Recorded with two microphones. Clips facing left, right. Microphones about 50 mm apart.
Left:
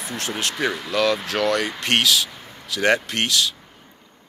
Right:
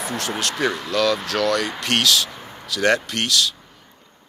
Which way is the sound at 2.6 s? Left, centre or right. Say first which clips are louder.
Even; left.